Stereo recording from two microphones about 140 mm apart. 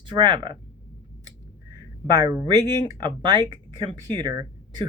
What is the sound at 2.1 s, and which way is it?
Speech, 25° right (ahead or behind).